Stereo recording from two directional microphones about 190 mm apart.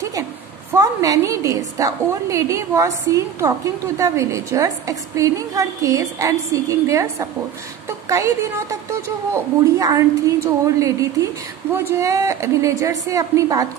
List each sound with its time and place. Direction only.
0.7 s a woman's voice: 15° right (ahead or behind)